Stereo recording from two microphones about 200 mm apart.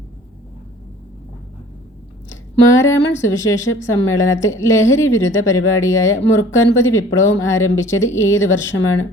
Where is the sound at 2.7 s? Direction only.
15° left (ahead or behind).